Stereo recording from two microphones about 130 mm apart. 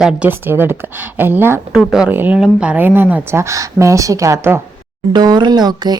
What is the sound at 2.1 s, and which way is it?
Speech, 15° right (ahead or behind).